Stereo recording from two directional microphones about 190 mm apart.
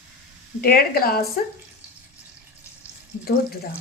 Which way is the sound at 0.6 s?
55° left (ahead or behind).